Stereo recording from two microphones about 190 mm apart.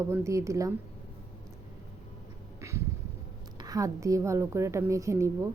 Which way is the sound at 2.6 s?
15° right (ahead or behind).